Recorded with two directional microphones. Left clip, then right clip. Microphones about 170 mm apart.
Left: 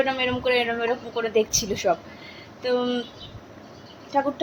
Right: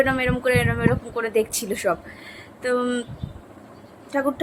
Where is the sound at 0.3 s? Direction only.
10° right (ahead or behind).